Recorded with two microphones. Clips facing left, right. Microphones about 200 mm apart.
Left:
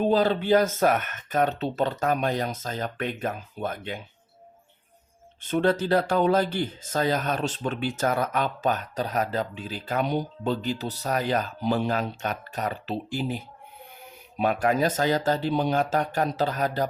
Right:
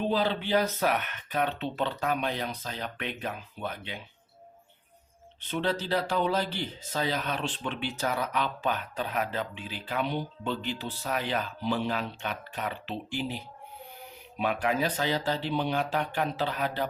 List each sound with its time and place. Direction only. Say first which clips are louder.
0.0 s speech: left 6 dB; 45° left (ahead or behind)
5.4 s speech: left 7 dB; 45° left (ahead or behind)